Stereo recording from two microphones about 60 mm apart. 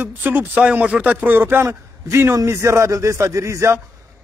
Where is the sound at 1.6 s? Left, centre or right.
Right.